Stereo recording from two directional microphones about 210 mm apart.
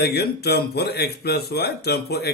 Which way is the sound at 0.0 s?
50° left (ahead or behind).